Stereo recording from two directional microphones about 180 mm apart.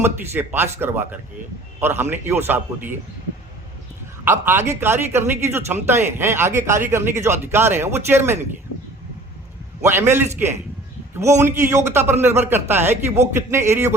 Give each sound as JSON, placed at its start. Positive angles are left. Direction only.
{"t": 0.0, "sound": "speech", "side_deg": -10}
{"t": 4.3, "sound": "speech", "side_deg": -15}
{"t": 9.8, "sound": "speech", "side_deg": -15}